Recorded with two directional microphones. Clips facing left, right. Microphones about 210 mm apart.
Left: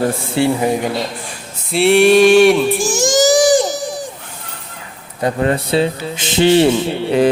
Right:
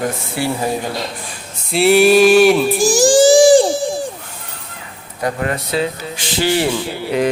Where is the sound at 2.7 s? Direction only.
35° right (ahead or behind).